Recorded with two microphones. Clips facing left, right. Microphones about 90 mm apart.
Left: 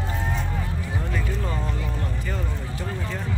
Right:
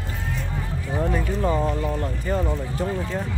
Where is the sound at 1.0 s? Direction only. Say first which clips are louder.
Right 8 dB; 30° right (ahead or behind).